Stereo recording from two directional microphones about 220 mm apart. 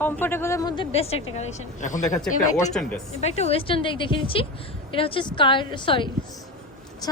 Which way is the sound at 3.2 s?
30° left (ahead or behind).